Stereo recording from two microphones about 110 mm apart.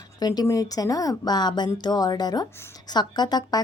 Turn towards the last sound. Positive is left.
turn(degrees=40)  # may be behind; listen again after turning